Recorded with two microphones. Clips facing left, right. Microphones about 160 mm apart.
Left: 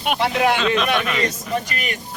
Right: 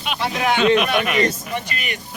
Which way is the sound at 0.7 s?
15° right (ahead or behind).